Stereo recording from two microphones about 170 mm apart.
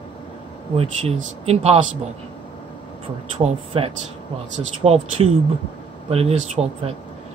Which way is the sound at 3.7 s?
35° right (ahead or behind).